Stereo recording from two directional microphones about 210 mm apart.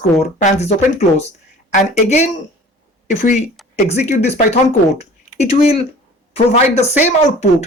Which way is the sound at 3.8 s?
30° left (ahead or behind).